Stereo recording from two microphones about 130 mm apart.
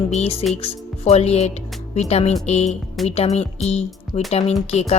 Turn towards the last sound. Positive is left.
turn(degrees=55)  # may be behind; listen again after turning